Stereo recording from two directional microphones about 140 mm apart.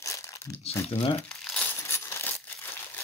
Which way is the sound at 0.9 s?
40° left (ahead or behind).